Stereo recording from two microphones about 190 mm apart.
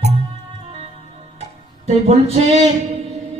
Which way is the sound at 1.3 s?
35° right (ahead or behind).